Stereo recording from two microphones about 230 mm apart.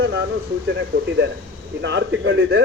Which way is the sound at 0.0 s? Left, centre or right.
Right.